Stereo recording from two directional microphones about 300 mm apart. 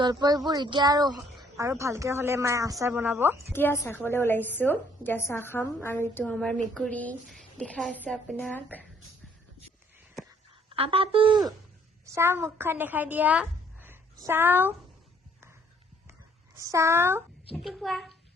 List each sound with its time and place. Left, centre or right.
0.0 s a woman's voice: centre
3.5 s a woman's voice: centre
10.7 s a woman's voice: centre
16.6 s a woman's voice: centre